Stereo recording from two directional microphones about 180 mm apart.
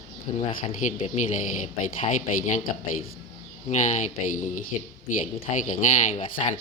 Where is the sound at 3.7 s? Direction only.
45° left (ahead or behind).